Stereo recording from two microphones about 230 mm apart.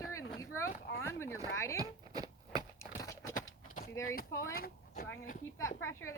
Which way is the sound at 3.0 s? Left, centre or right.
Centre.